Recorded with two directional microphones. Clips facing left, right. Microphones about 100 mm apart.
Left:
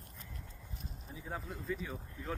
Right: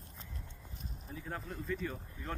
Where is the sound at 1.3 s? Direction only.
5° left (ahead or behind).